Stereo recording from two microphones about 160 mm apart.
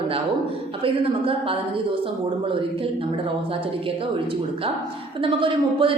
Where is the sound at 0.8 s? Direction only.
35° right (ahead or behind).